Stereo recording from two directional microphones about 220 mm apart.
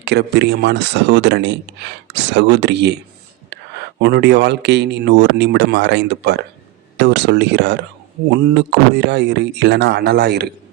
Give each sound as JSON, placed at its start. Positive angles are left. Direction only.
{"t": 0.0, "sound": "speech", "side_deg": -50}
{"t": 4.0, "sound": "speech", "side_deg": -50}
{"t": 9.0, "sound": "speech", "side_deg": -50}